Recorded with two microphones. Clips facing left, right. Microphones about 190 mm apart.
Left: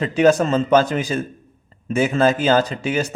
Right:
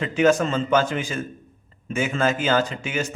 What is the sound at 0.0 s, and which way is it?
A man's voice, 35° left (ahead or behind).